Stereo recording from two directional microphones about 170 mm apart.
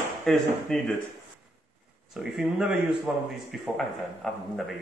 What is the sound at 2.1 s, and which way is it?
A man's voice, 5° right (ahead or behind).